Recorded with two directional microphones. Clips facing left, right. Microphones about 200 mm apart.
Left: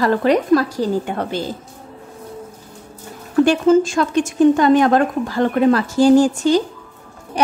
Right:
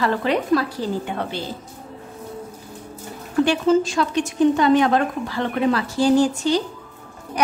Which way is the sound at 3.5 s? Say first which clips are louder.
Left 4 dB; 50° left (ahead or behind).